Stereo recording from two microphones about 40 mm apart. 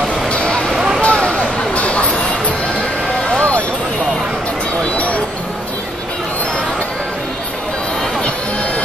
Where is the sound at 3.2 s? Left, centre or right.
Left.